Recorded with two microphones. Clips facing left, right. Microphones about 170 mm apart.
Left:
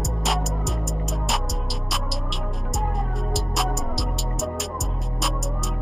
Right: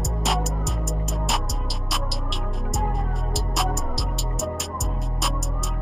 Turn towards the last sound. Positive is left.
turn(degrees=0)  # may be behind; listen again after turning